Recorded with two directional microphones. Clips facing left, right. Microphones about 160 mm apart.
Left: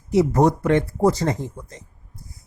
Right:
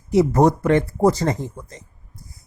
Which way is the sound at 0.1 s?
45° right (ahead or behind).